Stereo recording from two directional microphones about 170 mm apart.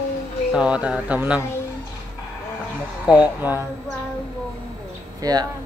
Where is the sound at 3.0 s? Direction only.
10° right (ahead or behind).